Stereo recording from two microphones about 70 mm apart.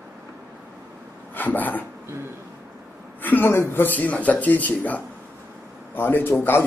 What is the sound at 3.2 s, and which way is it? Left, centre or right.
A man's voice, left.